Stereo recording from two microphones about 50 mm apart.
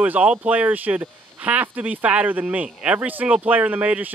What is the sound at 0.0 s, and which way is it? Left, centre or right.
Speech, right.